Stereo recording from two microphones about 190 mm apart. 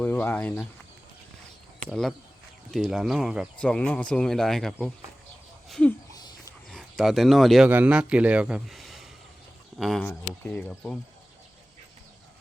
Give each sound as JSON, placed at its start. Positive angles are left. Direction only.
{"t": 0.0, "sound": "speech", "side_deg": 10}
{"t": 1.9, "sound": "speech", "side_deg": 0}
{"t": 6.1, "sound": "a sound", "side_deg": 20}
{"t": 6.7, "sound": "speech", "side_deg": 0}